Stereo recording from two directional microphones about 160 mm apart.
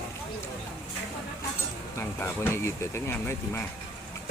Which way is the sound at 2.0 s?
15° left (ahead or behind).